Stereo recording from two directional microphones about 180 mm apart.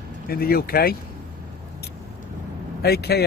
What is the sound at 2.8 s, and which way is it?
Speech, 60° left (ahead or behind).